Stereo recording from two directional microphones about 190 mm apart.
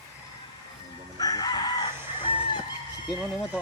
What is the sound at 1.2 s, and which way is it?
Chicken, 20° left (ahead or behind).